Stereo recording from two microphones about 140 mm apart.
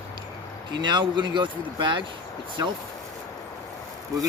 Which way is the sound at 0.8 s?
35° right (ahead or behind).